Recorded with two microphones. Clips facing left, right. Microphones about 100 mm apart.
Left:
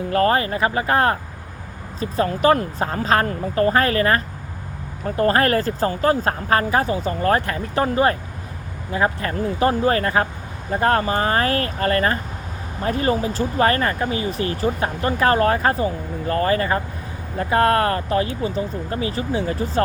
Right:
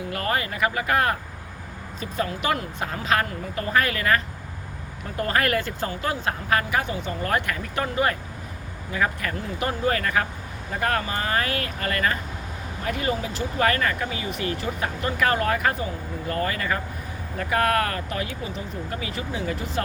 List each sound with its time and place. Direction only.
0.1 s speech: 35° left (ahead or behind)